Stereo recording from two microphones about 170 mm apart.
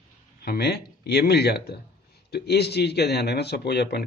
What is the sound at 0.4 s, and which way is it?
Speech, 70° left (ahead or behind).